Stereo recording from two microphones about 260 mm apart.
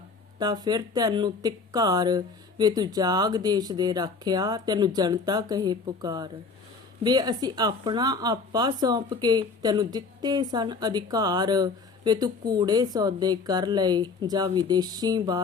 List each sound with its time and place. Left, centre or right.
0.3 s speech: centre